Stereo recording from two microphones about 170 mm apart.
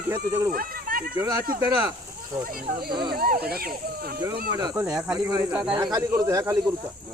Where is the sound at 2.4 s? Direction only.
55° right (ahead or behind).